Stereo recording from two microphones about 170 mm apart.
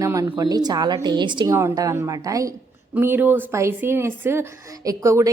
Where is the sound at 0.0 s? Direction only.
20° right (ahead or behind).